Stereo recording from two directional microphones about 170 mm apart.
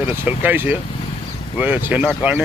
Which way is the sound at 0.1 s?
10° right (ahead or behind).